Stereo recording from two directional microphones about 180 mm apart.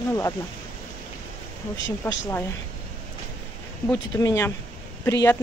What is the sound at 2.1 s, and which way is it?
Speech, 15° left (ahead or behind).